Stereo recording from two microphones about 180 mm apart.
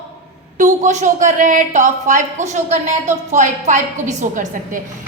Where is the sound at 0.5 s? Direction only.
45° right (ahead or behind).